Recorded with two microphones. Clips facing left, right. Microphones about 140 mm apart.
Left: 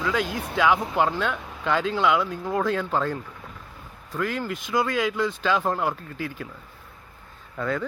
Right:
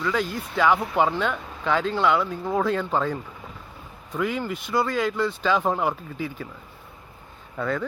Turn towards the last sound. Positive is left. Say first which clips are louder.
# right 1 dB
turn(degrees=0)  # may be behind; listen again after turning